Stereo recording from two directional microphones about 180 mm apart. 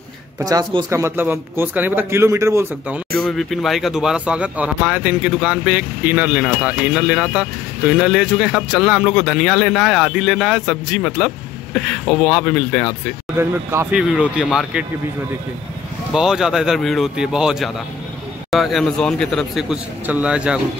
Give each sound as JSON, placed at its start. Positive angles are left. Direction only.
{"t": 0.4, "sound": "a man's voice", "side_deg": -20}
{"t": 3.2, "sound": "speech", "side_deg": 0}
{"t": 13.4, "sound": "a man's voice", "side_deg": -15}
{"t": 16.1, "sound": "speech", "side_deg": 0}